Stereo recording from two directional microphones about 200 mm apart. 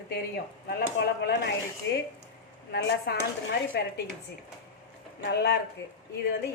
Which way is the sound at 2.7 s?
55° left (ahead or behind).